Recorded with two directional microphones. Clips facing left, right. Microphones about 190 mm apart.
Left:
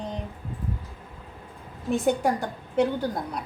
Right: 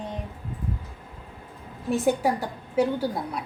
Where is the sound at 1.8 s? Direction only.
5° right (ahead or behind).